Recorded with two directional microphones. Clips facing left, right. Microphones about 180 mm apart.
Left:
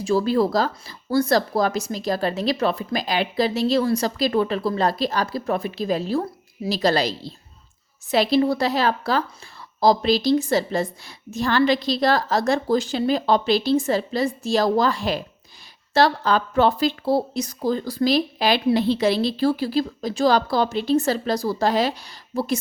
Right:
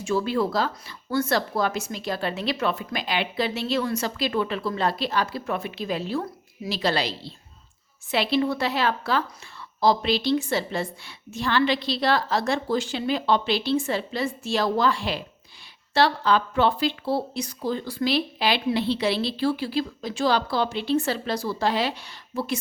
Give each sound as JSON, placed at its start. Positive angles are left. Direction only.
{"t": 0.0, "sound": "a woman's voice", "side_deg": 35}